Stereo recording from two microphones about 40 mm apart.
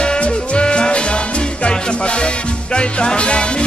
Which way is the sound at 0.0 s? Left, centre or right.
Left.